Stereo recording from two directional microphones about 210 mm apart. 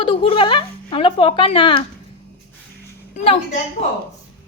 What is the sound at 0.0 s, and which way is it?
Speech, 25° left (ahead or behind).